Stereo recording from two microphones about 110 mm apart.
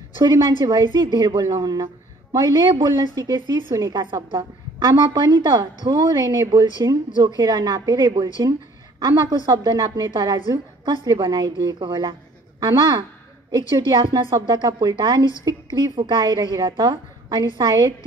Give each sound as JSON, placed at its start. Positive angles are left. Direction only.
{"t": 0.2, "sound": "a woman's voice", "side_deg": -45}
{"t": 9.5, "sound": "a woman's voice", "side_deg": -40}